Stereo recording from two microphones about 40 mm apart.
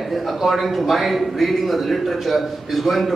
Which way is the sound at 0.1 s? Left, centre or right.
Centre.